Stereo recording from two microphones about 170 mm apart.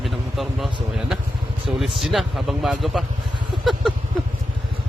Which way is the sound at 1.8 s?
Centre (ahead or behind).